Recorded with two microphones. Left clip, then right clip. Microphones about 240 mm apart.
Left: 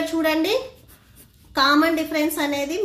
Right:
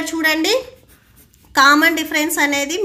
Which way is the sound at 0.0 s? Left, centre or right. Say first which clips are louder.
Right 4 dB; right.